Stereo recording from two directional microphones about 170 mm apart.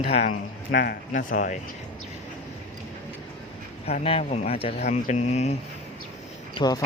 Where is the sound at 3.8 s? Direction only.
35° left (ahead or behind).